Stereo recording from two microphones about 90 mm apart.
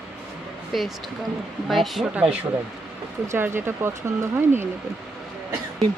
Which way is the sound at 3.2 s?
25° right (ahead or behind).